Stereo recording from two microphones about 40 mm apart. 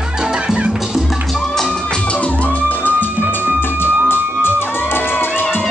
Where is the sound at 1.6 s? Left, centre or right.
Left.